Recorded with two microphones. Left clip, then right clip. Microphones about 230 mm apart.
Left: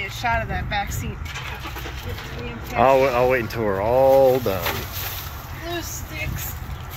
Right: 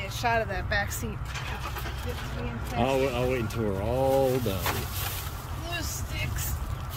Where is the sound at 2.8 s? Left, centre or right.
Centre.